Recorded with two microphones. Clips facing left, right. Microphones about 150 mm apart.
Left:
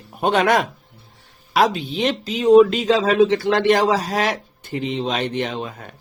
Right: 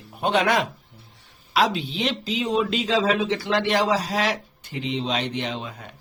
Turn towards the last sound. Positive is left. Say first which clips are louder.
# left 3 dB
turn(degrees=50)  # may be behind; listen again after turning